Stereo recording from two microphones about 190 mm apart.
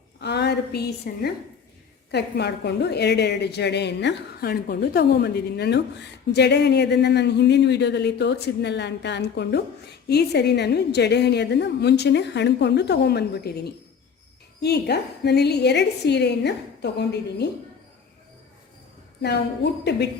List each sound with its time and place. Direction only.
0.2 s a woman's voice: 60° left (ahead or behind)